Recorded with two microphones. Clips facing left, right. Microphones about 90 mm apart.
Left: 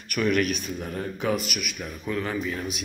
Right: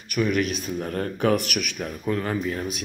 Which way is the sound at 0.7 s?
50° right (ahead or behind).